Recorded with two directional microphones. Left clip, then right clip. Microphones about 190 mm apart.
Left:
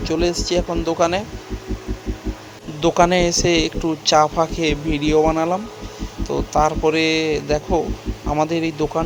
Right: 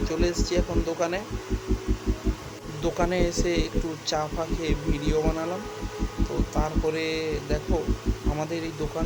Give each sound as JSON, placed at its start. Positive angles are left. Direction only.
{"t": 0.0, "sound": "speech", "side_deg": 35}
{"t": 2.8, "sound": "speech", "side_deg": 40}
{"t": 6.5, "sound": "speech", "side_deg": 40}